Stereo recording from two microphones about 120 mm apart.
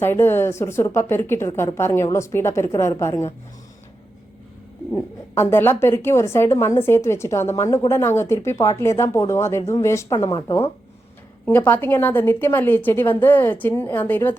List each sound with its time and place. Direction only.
0.0 s a woman's voice: 20° left (ahead or behind)
4.9 s a woman's voice: 20° left (ahead or behind)
11.4 s a woman's voice: 15° left (ahead or behind)